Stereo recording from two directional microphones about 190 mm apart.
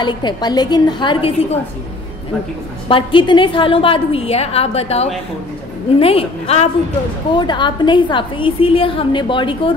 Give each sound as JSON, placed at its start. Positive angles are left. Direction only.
{"t": 0.0, "sound": "a woman's voice", "side_deg": 25}
{"t": 2.9, "sound": "a woman's voice", "side_deg": 25}